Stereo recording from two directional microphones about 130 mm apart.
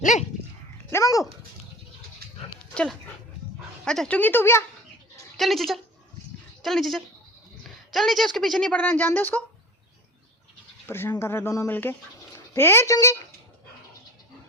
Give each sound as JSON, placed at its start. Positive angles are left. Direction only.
{"t": 0.0, "sound": "speech", "side_deg": 70}
{"t": 0.9, "sound": "dog", "side_deg": 25}
{"t": 3.8, "sound": "speech", "side_deg": 5}
{"t": 5.4, "sound": "speech", "side_deg": 0}
{"t": 10.8, "sound": "speech", "side_deg": 15}